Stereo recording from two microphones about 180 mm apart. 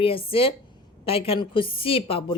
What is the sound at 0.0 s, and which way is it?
A woman's voice, 30° left (ahead or behind).